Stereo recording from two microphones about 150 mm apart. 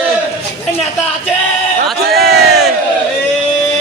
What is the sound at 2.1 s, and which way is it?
Crowd, 5° right (ahead or behind).